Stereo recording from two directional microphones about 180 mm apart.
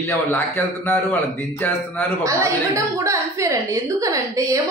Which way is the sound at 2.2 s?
15° right (ahead or behind).